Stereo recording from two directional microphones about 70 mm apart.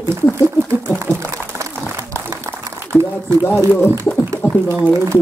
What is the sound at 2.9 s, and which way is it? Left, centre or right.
Speech, left.